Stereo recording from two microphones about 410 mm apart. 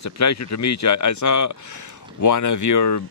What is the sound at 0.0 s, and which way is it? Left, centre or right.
Speech, left.